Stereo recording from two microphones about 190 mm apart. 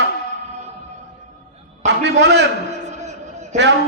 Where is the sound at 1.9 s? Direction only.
70° right (ahead or behind).